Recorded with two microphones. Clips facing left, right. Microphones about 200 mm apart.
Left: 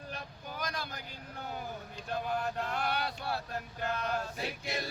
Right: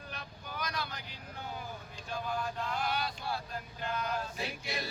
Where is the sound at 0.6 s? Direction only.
50° left (ahead or behind).